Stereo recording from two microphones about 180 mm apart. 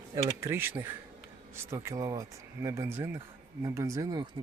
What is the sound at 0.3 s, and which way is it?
Speech, 15° right (ahead or behind).